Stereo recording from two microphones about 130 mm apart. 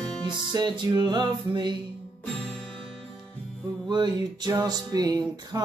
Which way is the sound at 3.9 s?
35° right (ahead or behind).